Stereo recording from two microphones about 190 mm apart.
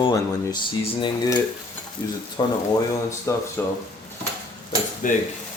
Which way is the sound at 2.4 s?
25° left (ahead or behind).